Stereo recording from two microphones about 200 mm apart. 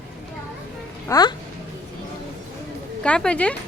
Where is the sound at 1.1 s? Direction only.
20° left (ahead or behind).